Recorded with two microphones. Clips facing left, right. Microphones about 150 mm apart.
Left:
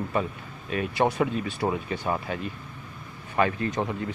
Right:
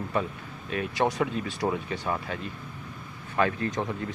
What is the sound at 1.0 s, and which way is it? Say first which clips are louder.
Speech: left 2 dB; 15° left (ahead or behind).